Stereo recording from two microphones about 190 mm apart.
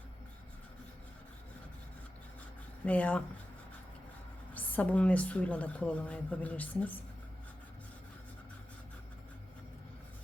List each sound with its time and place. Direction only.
2.8 s a woman's voice: 5° left (ahead or behind)
4.5 s a woman's voice: 10° left (ahead or behind)